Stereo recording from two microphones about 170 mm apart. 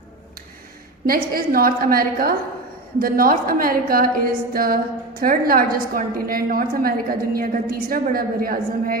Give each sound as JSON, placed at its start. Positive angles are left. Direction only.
{"t": 1.0, "sound": "a woman's voice", "side_deg": -60}